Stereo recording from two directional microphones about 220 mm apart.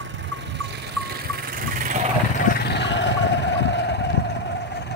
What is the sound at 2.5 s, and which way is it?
Vehicle, 45° left (ahead or behind).